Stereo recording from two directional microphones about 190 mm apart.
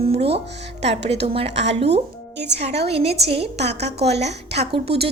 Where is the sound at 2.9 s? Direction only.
30° right (ahead or behind).